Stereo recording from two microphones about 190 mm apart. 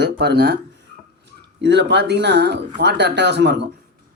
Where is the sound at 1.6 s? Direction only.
65° right (ahead or behind).